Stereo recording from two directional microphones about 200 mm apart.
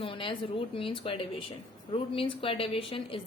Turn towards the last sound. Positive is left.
turn(degrees=25)  # may be behind; listen again after turning